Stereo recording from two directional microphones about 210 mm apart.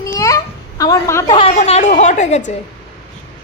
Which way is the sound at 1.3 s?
30° left (ahead or behind).